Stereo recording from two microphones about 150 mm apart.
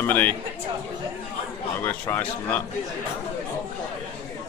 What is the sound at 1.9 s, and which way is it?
Speech, 15° left (ahead or behind).